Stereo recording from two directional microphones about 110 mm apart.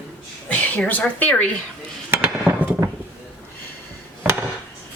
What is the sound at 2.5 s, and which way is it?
Mechanisms, 20° right (ahead or behind).